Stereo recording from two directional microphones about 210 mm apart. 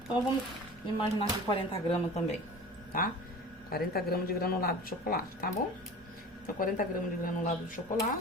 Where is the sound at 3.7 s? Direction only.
45° left (ahead or behind).